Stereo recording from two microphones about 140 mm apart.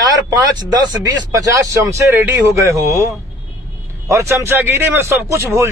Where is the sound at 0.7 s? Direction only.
30° right (ahead or behind).